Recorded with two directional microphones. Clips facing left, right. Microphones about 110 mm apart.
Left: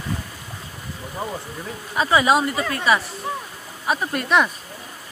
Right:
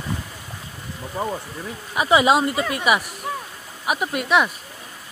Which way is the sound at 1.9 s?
20° right (ahead or behind).